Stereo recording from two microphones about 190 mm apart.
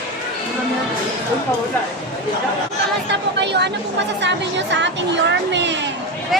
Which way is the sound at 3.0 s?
65° right (ahead or behind).